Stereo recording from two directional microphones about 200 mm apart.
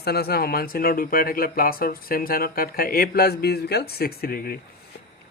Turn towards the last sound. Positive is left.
turn(degrees=50)  # may be behind; listen again after turning